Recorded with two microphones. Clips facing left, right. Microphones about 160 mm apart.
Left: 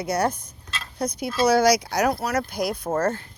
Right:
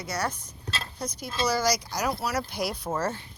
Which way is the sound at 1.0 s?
60° left (ahead or behind).